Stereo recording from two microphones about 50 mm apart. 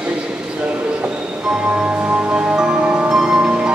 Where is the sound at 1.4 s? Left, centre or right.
Centre.